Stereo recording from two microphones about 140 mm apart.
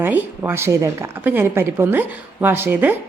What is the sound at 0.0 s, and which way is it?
A woman's voice, 15° right (ahead or behind).